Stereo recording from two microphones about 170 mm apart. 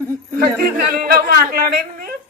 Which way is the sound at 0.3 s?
60° right (ahead or behind).